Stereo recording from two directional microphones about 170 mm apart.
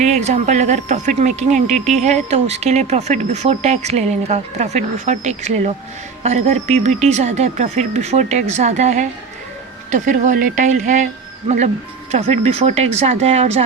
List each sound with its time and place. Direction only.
0.0 s speech: 40° right (ahead or behind)